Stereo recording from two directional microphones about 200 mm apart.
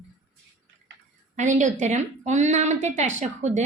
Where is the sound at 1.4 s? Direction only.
35° right (ahead or behind).